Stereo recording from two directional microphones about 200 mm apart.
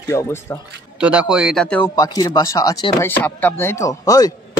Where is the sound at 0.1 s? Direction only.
15° left (ahead or behind).